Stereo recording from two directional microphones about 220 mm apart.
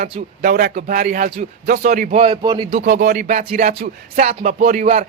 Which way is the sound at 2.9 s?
45° right (ahead or behind).